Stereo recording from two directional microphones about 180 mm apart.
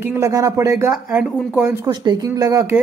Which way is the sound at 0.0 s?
15° right (ahead or behind).